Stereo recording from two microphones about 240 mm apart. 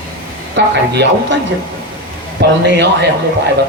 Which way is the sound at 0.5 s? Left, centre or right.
Right.